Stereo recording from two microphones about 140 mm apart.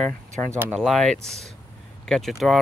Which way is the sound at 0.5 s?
15° right (ahead or behind).